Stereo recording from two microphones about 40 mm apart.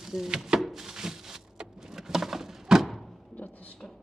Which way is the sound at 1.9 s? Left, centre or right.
Centre.